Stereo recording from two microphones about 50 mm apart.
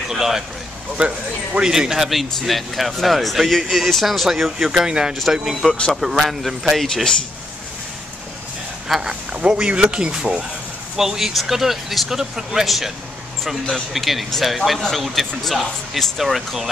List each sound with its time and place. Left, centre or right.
0.1 s speech: centre
0.9 s speech: centre
1.7 s speech: centre
5.3 s speech: centre
5.7 s speech: centre
5.9 s speech: centre
6.9 s speech: centre
8.8 s speech: centre
9.3 s speech: right
11.0 s speech: centre
13.9 s speech: centre